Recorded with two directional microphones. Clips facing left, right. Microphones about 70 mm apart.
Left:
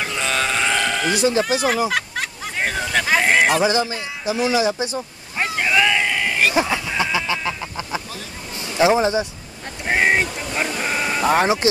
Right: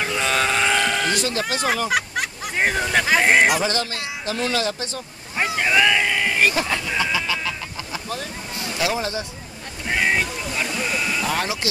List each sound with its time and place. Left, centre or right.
0.0 s vehicle: centre
1.1 s speech: centre
1.9 s hubbub: centre
3.1 s speech: centre
3.6 s speech: centre
5.4 s vehicle: centre
6.5 s speech: centre
7.0 s a sound: centre
8.7 s speech: left
9.8 s a sound: left